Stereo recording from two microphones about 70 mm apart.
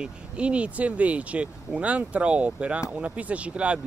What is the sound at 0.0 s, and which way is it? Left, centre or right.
Speech, centre.